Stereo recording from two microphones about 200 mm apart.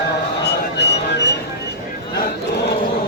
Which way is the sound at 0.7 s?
60° left (ahead or behind).